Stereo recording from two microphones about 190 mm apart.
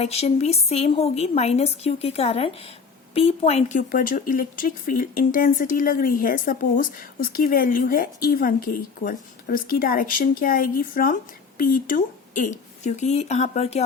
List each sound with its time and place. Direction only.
0.0 s a woman's voice: 35° left (ahead or behind)